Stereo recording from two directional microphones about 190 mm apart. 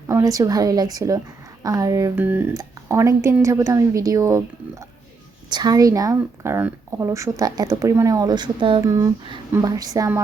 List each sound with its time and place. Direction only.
0.1 s a woman's voice: 20° right (ahead or behind)